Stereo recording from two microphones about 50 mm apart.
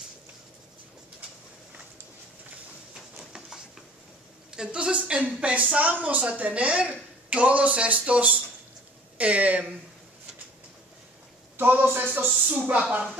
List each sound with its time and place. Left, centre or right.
2.9 s a sound: centre
4.6 s speech: centre
5.2 s a man's voice: right
11.5 s a man's voice: right